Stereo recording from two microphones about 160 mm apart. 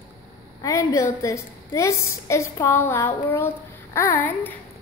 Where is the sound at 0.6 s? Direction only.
20° left (ahead or behind).